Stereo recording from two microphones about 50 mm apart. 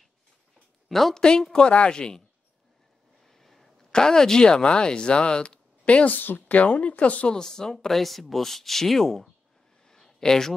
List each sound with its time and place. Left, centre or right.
0.8 s speech: centre
1.5 s a woman's voice: left
3.3 s a sound: centre
3.9 s speech: centre; by 7.3 s left
7.3 s speech: centre
9.8 s a sound: centre